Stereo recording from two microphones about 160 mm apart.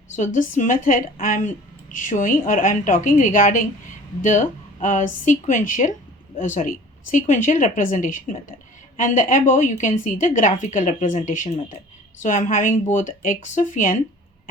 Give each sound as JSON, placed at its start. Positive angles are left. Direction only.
{"t": 0.2, "sound": "a woman's voice", "side_deg": 50}